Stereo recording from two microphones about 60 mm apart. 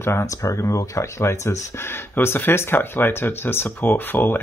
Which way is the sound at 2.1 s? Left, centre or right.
Left.